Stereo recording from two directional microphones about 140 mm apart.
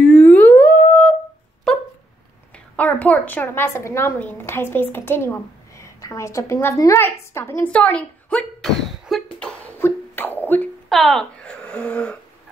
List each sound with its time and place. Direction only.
0.0 s theremin: 10° left (ahead or behind)
1.7 s dog: centre (ahead or behind)
2.7 s a woman's voice: 10° left (ahead or behind)
7.7 s a sound: 10° left (ahead or behind)
9.8 s music: 15° left (ahead or behind)
10.9 s a sound: centre (ahead or behind)